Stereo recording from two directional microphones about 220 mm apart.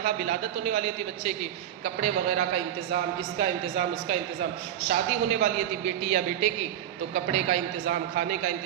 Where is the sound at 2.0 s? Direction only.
35° right (ahead or behind).